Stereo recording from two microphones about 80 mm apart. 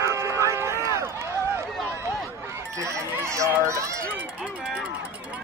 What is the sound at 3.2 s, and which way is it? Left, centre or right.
Run, right.